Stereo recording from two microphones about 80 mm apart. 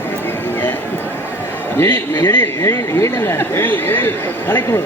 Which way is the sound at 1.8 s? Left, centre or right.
Left.